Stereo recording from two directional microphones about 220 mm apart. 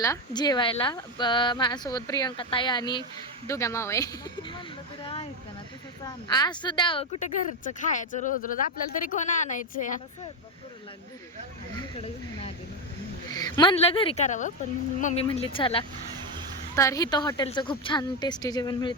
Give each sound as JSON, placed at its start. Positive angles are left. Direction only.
{"t": 0.0, "sound": "a woman's voice", "side_deg": 15}
{"t": 13.3, "sound": "speech", "side_deg": 20}